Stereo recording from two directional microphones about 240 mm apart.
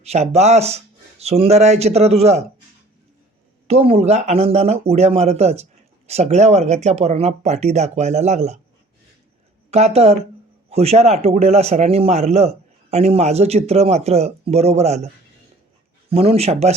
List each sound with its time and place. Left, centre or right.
0.0 s speech: right
3.7 s speech: right
9.6 s speech: right